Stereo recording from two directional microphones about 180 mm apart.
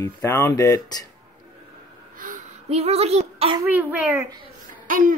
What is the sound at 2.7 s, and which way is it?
Speech, 35° right (ahead or behind).